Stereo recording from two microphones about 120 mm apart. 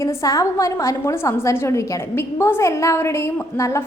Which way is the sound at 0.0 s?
30° left (ahead or behind).